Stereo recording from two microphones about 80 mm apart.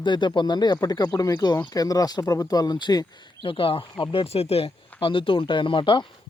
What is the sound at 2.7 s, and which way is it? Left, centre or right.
Speech, left.